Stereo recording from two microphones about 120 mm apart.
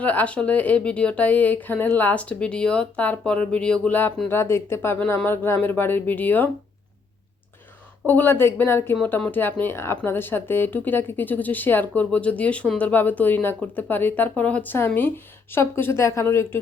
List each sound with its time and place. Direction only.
0.0 s speech: 10° left (ahead or behind)
8.0 s speech: 20° left (ahead or behind)